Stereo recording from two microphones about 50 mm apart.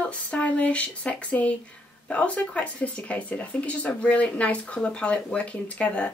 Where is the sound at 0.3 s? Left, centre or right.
Left.